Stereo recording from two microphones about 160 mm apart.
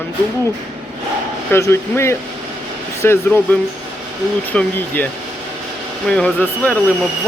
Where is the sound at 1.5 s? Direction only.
15° left (ahead or behind).